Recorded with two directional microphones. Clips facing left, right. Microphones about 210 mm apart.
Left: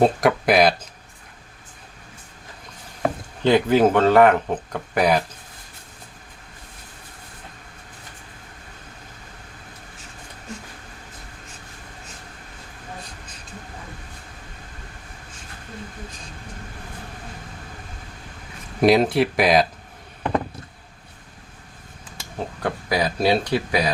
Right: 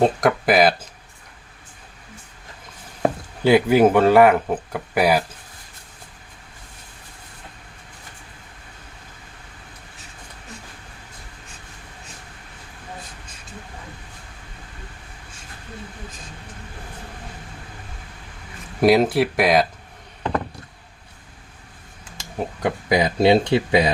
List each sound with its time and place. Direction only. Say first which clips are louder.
0.2 s speech: even; centre (ahead or behind)
3.4 s speech: right 2 dB; 10° right (ahead or behind)
18.8 s speech: right 1 dB; centre (ahead or behind)
22.4 s speech: right 3 dB; 15° right (ahead or behind)